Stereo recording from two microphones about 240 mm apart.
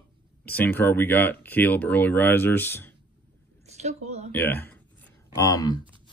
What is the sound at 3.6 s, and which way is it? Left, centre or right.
Speech, right.